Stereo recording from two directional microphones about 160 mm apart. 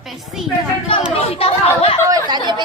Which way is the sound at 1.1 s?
35° left (ahead or behind).